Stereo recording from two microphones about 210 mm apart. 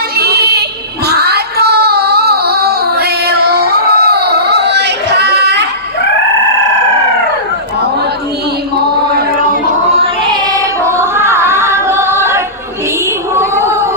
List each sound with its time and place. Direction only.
0.2 s child singing: 50° right (ahead or behind)
8.8 s chant: 45° right (ahead or behind)
10.8 s singing: 10° right (ahead or behind)
13.3 s a sound: 10° right (ahead or behind)